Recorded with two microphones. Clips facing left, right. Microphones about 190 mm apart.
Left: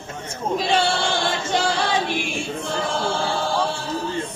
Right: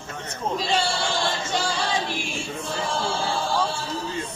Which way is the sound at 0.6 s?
60° left (ahead or behind).